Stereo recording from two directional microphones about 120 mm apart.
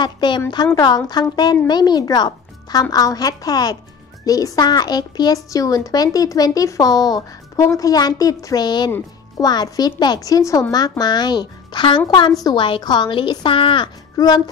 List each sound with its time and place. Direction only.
0.0 s a child's voice: 40° left (ahead or behind)
14.1 s speech: 35° left (ahead or behind)